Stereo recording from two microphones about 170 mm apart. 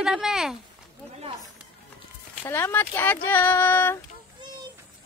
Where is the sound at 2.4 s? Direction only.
15° left (ahead or behind).